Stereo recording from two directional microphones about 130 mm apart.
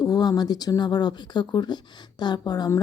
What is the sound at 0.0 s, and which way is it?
Speech, 30° left (ahead or behind).